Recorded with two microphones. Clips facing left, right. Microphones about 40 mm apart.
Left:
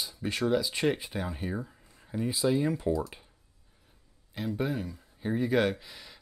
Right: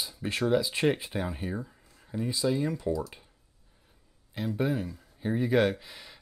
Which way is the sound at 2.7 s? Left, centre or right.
Left.